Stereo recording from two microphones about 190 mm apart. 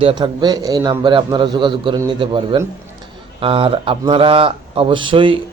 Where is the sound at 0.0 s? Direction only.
25° right (ahead or behind).